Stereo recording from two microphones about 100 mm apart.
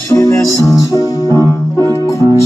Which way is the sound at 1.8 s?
30° left (ahead or behind).